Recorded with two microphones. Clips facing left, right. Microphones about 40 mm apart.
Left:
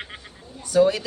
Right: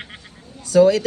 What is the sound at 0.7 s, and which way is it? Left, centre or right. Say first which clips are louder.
Speech: right 5 dB; right.